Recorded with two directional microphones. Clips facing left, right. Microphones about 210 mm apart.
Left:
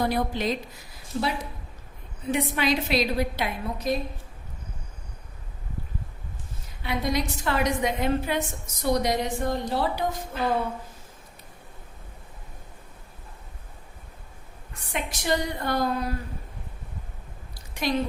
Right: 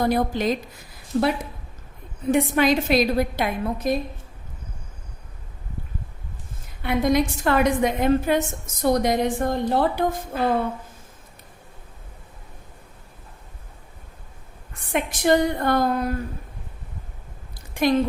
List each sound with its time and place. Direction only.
0.0 s a woman's voice: 45° right (ahead or behind)
2.3 s a woman's voice: 50° right (ahead or behind)
6.8 s a woman's voice: 50° right (ahead or behind)
14.9 s a woman's voice: 50° right (ahead or behind)
17.5 s a sound: 55° right (ahead or behind)